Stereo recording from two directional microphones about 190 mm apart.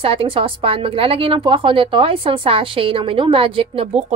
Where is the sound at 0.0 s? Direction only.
30° right (ahead or behind).